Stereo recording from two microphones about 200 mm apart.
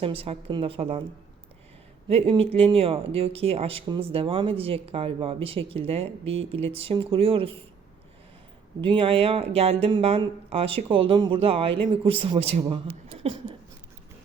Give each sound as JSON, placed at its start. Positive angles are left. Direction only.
{"t": 0.0, "sound": "speech", "side_deg": -30}
{"t": 2.0, "sound": "speech", "side_deg": -30}
{"t": 8.8, "sound": "speech", "side_deg": -25}